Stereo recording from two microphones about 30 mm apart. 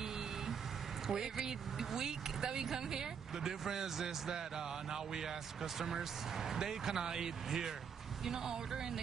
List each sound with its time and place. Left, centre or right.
1.0 s speech: centre